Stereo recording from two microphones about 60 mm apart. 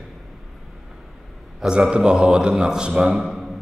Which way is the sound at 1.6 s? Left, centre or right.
Centre.